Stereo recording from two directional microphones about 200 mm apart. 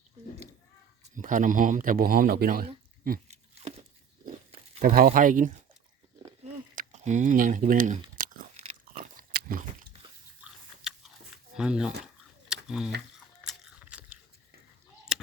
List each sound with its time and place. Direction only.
1.0 s speech: 40° right (ahead or behind)
4.8 s speech: 45° right (ahead or behind)
6.4 s a sound: 35° right (ahead or behind)
8.8 s pig: 45° right (ahead or behind)
10.4 s biting: 5° right (ahead or behind)
11.5 s camera: 5° right (ahead or behind)
13.1 s biting: centre (ahead or behind)
15.1 s a sound: centre (ahead or behind)